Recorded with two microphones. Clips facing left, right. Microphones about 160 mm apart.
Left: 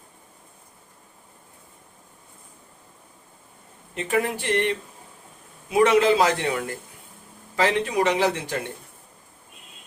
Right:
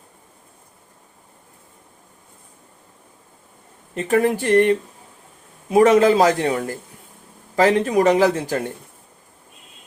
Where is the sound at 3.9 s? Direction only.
45° right (ahead or behind).